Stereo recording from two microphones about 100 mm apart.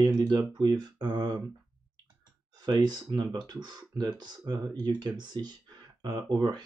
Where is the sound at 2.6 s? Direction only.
45° right (ahead or behind).